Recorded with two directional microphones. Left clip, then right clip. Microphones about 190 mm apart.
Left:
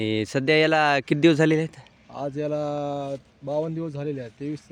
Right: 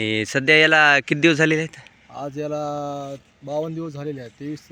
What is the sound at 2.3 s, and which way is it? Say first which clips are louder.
Speech: right 1 dB; 40° left (ahead or behind).